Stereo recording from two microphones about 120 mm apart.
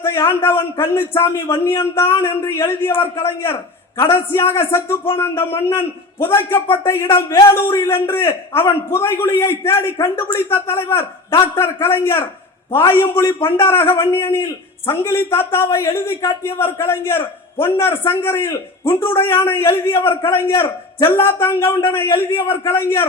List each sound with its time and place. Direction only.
0.0 s a man's voice: 20° left (ahead or behind)